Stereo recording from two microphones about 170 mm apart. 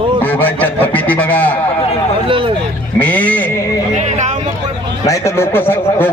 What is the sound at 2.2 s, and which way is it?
Speech, 30° right (ahead or behind).